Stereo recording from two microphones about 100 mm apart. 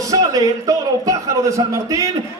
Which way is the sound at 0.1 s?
35° right (ahead or behind).